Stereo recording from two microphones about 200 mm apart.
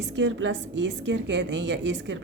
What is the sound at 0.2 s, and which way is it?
A woman's voice, 65° right (ahead or behind).